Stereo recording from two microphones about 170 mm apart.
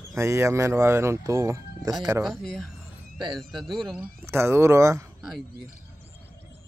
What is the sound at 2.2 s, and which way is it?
A man's voice, centre (ahead or behind).